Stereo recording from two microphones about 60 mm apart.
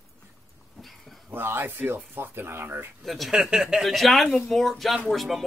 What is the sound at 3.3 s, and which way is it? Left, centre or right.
Speech, centre.